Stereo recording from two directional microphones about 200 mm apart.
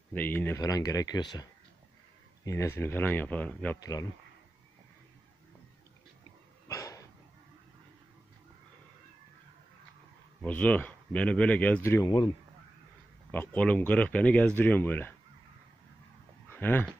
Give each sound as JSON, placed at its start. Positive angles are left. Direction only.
{"t": 0.1, "sound": "speech", "side_deg": 10}
{"t": 6.7, "sound": "dog", "side_deg": 15}
{"t": 10.4, "sound": "speech", "side_deg": 5}
{"t": 13.3, "sound": "speech", "side_deg": 10}
{"t": 16.4, "sound": "speech", "side_deg": 10}